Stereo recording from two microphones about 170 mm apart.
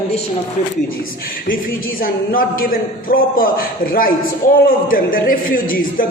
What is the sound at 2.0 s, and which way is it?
A man's voice, 55° left (ahead or behind).